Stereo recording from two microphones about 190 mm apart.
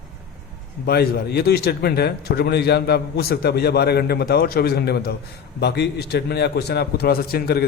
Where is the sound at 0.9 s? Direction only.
55° left (ahead or behind).